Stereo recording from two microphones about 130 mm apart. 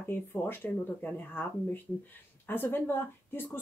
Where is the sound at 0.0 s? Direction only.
15° left (ahead or behind).